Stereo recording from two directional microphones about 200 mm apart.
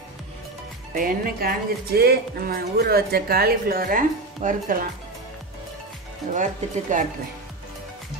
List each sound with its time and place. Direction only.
0.9 s speech: 45° right (ahead or behind)
6.3 s speech: 40° right (ahead or behind)